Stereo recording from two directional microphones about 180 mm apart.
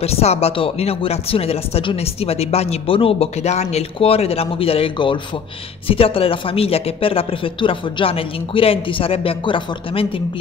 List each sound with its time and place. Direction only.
0.0 s speech: 35° left (ahead or behind)